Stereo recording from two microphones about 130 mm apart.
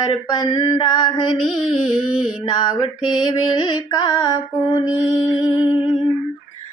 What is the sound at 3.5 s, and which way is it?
Female singing, 35° left (ahead or behind).